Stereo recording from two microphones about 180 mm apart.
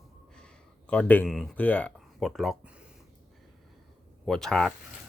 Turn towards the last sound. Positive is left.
turn(degrees=5)  # may be behind; listen again after turning